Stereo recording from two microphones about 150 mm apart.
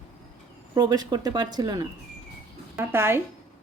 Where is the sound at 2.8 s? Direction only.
15° right (ahead or behind).